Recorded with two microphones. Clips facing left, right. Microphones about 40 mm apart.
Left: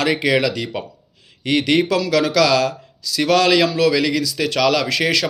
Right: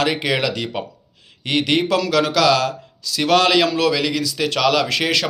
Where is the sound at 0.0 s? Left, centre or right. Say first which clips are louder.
Left 2 dB; right.